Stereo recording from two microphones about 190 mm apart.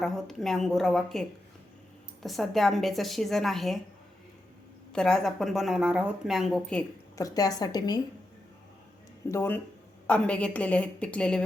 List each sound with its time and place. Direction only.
0.0 s speech: centre (ahead or behind)
4.9 s speech: 5° left (ahead or behind)
7.2 s a woman's voice: 20° left (ahead or behind)
9.3 s a woman's voice: 10° left (ahead or behind)